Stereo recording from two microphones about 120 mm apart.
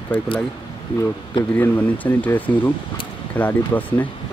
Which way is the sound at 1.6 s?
15° left (ahead or behind).